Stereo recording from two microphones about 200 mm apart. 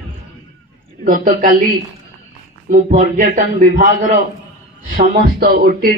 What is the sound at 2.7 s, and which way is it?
Speech, 40° right (ahead or behind).